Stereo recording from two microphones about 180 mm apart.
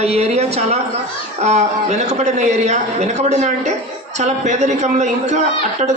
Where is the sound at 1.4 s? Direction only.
40° right (ahead or behind).